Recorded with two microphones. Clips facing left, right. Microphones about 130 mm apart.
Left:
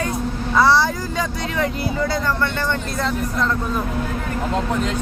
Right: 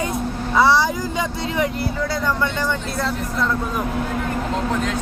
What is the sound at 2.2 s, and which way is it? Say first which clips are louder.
Speech: even; 10° right (ahead or behind).